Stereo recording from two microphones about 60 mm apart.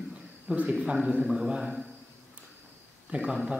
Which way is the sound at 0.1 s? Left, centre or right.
Centre.